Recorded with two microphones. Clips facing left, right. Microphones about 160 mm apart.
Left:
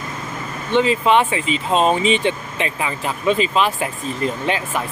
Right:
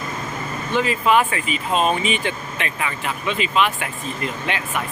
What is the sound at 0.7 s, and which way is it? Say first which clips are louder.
Speech: left 3 dB; 25° left (ahead or behind).